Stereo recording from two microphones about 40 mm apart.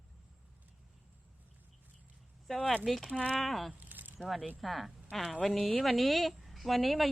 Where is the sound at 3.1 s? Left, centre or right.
Left.